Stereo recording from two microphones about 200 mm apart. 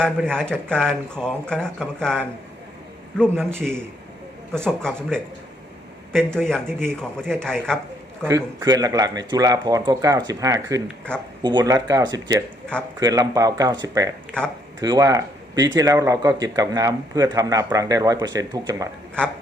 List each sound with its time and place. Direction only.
0.0 s speech: 5° left (ahead or behind)
4.5 s speech: 5° left (ahead or behind)
8.2 s speech: 10° right (ahead or behind)